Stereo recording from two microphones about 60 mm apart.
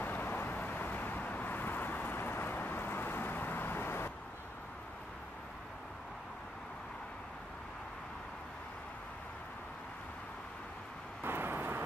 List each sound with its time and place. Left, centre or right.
0.0 s vehicle: left
11.2 s vehicle: right